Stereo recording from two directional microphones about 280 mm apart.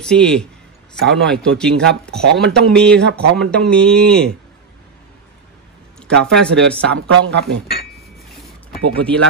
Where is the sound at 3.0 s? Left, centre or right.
Right.